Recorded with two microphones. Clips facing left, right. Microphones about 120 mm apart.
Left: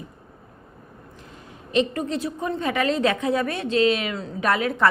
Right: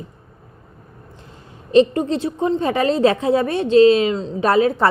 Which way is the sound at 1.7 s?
30° right (ahead or behind).